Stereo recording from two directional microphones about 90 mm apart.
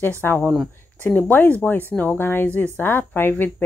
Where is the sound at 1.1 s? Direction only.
20° left (ahead or behind).